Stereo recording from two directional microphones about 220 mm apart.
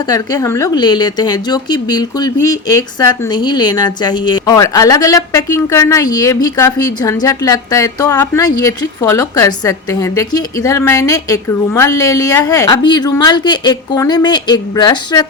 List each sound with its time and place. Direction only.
0.1 s a woman's voice: 15° left (ahead or behind)